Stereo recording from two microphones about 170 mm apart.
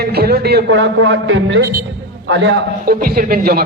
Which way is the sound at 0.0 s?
65° right (ahead or behind).